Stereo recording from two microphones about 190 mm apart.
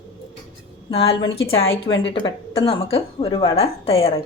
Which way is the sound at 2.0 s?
30° left (ahead or behind).